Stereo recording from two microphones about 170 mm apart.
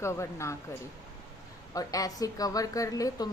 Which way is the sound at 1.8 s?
20° left (ahead or behind).